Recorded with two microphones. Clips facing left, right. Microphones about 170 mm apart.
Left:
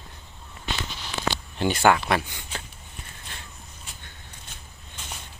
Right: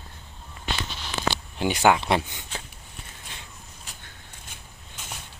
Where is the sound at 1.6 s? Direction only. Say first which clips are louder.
Even; 15° right (ahead or behind).